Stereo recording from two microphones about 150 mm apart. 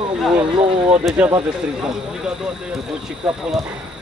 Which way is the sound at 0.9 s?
10° right (ahead or behind).